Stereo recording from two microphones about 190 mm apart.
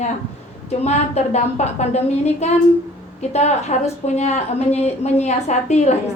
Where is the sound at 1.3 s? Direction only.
35° left (ahead or behind).